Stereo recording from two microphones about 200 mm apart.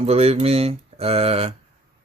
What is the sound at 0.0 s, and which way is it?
Speech, 30° right (ahead or behind).